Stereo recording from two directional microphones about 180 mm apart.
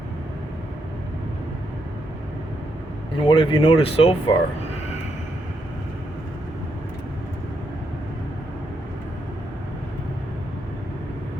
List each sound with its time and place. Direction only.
3.2 s speech: 30° left (ahead or behind)